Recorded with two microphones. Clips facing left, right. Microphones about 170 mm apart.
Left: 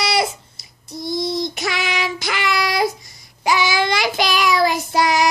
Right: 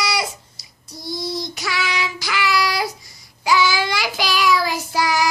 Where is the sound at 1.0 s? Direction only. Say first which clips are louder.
Left 5 dB; 20° left (ahead or behind).